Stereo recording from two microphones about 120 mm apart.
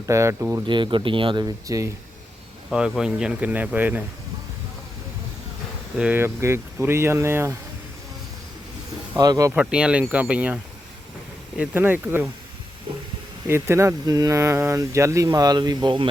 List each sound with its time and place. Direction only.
0.0 s speech: 25° right (ahead or behind)
0.7 s speech: 45° right (ahead or behind)
1.6 s speech: 30° right (ahead or behind)
2.7 s speech: 5° right (ahead or behind)
6.0 s speech: 15° right (ahead or behind)
9.1 s speech: 30° right (ahead or behind)
9.6 s speech: 10° right (ahead or behind)
13.5 s speech: 20° right (ahead or behind); by 16.0 s 40° right (ahead or behind)